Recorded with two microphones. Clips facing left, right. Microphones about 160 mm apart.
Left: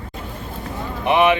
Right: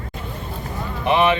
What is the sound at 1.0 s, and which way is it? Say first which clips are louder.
Speech: left 2 dB; 15° left (ahead or behind).